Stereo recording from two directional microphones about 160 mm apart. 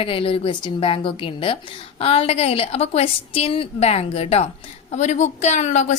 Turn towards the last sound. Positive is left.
turn(degrees=50)  # may be behind; listen again after turning